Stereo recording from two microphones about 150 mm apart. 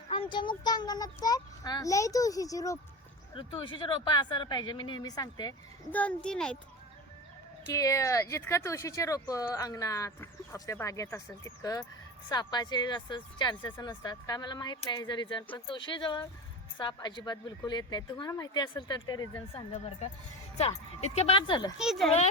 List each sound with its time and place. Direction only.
0.1 s speech: 30° left (ahead or behind)
3.3 s speech: 35° left (ahead or behind)
5.9 s a child's voice: 10° left (ahead or behind)
7.7 s speech: 20° left (ahead or behind)
19.5 s speech: 45° left (ahead or behind)
21.8 s speech: centre (ahead or behind)